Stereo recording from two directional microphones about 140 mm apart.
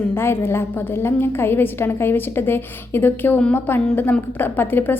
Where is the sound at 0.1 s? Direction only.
15° left (ahead or behind).